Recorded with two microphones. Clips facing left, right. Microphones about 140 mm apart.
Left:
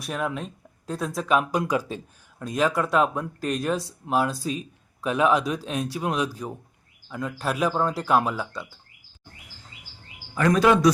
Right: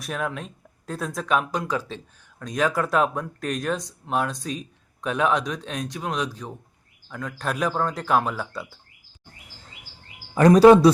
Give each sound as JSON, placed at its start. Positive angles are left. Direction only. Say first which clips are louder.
{"t": 0.0, "sound": "speech", "louder": "left 1 dB", "side_deg": 0}
{"t": 10.3, "sound": "speech", "louder": "right 7 dB", "side_deg": -35}